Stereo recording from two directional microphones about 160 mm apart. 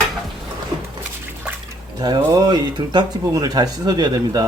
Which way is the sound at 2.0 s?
25° right (ahead or behind).